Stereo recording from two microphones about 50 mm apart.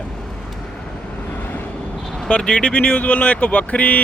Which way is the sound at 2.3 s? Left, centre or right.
Left.